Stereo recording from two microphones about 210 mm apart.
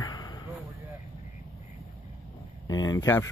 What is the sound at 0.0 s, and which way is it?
Basketball bounce, 20° left (ahead or behind).